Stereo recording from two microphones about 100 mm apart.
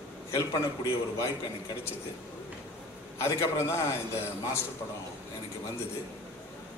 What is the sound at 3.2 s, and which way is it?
A man's voice, 30° left (ahead or behind).